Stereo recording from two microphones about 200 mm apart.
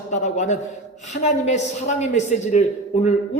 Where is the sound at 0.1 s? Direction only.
35° left (ahead or behind).